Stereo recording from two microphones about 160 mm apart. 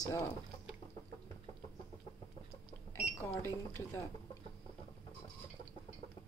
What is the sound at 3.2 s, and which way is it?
Speech, 15° left (ahead or behind).